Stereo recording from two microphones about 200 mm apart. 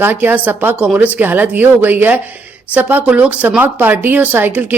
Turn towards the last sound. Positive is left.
turn(degrees=-10)  # may be behind; listen again after turning